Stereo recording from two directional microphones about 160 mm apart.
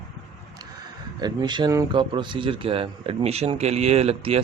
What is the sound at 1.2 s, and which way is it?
A man's voice, 25° right (ahead or behind).